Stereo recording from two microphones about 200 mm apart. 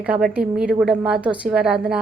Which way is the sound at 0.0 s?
5° right (ahead or behind).